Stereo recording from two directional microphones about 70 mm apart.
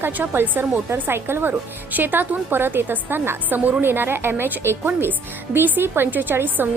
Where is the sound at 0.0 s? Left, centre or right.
Right.